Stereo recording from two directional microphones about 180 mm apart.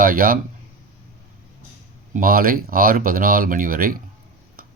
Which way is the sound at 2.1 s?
55° right (ahead or behind).